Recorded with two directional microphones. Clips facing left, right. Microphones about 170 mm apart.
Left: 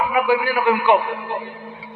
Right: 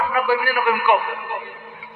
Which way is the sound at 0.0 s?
15° left (ahead or behind).